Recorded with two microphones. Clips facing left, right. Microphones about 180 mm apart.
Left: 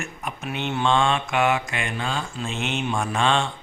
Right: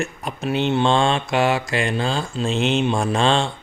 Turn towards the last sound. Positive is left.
turn(degrees=-30)  # may be behind; listen again after turning